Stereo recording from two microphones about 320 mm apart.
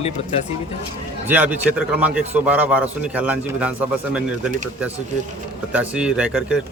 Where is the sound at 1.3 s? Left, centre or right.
Centre.